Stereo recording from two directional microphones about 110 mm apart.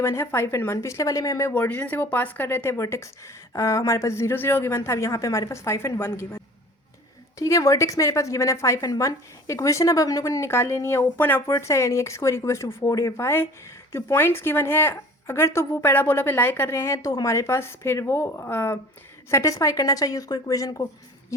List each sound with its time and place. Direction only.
0.0 s speech: 25° left (ahead or behind)
1.5 s a woman's voice: 15° left (ahead or behind); by 20.8 s 35° left (ahead or behind)